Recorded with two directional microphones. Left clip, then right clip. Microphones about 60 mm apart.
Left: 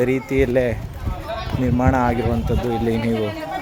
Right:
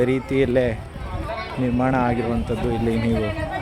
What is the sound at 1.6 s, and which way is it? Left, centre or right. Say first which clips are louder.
Speech: left 2 dB; left.